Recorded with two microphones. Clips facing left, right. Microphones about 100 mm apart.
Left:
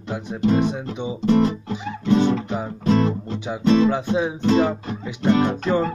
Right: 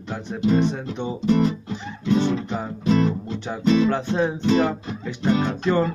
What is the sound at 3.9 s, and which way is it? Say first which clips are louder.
Music: even; 10° left (ahead or behind).